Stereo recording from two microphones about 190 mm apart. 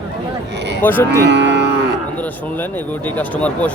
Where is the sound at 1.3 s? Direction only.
65° right (ahead or behind).